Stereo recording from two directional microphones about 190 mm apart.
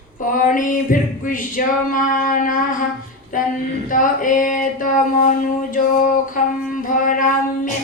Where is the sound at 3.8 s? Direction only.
45° left (ahead or behind).